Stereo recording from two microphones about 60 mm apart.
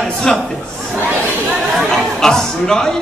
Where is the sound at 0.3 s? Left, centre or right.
Centre.